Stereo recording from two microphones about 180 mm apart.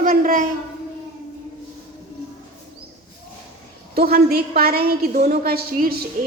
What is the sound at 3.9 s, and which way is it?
A woman's voice, 60° right (ahead or behind).